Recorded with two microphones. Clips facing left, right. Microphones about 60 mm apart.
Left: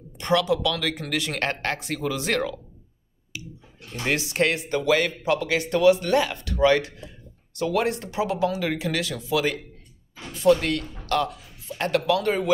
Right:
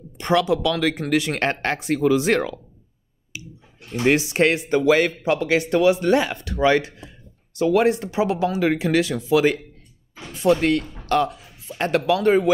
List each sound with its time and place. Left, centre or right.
0.2 s speech: right
3.9 s speech: right